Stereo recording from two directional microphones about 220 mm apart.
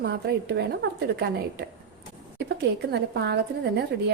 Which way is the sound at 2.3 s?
50° right (ahead or behind).